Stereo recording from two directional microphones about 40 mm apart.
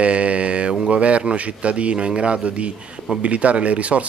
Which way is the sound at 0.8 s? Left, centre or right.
Right.